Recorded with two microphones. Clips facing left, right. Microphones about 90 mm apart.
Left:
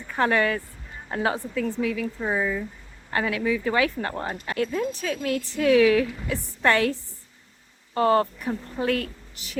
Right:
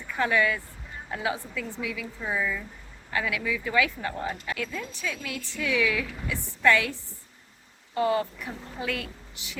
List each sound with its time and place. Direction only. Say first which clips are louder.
0.1 s speech: left 3 dB; 40° left (ahead or behind)
3.1 s speech: left 5 dB; 40° left (ahead or behind)
7.9 s a woman's voice: left 5 dB; 50° left (ahead or behind)